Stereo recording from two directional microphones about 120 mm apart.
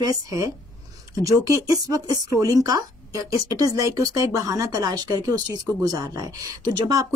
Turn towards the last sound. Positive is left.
turn(degrees=-30)  # may be behind; listen again after turning